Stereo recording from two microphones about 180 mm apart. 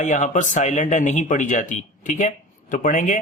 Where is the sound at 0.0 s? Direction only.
40° left (ahead or behind).